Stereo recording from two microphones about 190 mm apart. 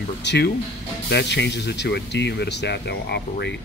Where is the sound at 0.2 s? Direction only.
65° left (ahead or behind).